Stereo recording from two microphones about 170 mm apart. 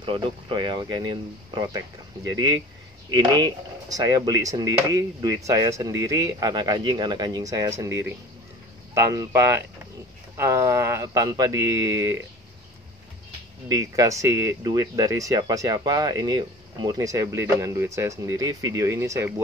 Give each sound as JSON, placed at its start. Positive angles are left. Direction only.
{"t": 0.0, "sound": "speech", "side_deg": -30}
{"t": 13.7, "sound": "speech", "side_deg": -20}